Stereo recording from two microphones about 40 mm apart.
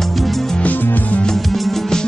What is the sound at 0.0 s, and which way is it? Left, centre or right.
Music, centre.